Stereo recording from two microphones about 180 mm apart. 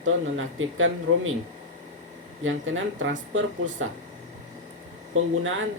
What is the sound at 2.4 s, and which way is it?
Speech, 90° right.